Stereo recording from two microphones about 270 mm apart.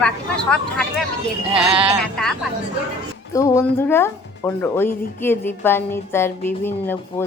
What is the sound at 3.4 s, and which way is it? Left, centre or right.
A woman's voice, centre.